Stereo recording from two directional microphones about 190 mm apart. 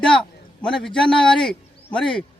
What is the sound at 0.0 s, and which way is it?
A man's voice, 5° left (ahead or behind).